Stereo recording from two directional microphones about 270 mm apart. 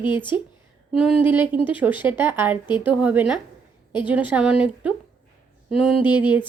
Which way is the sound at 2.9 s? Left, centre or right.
Centre.